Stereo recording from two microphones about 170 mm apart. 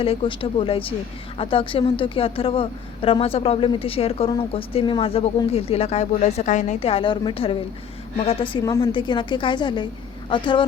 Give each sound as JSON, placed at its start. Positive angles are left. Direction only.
{"t": 0.0, "sound": "speech", "side_deg": 35}
{"t": 8.6, "sound": "a woman's voice", "side_deg": 25}